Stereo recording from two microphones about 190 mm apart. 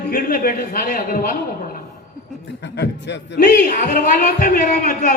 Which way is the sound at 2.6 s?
65° left (ahead or behind).